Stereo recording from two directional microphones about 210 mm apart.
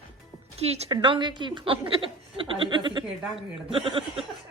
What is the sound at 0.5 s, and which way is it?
A woman's voice, 30° right (ahead or behind).